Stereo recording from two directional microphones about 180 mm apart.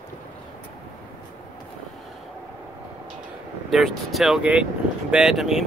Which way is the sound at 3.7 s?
Centre (ahead or behind).